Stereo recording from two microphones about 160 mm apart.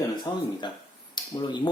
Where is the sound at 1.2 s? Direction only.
30° left (ahead or behind).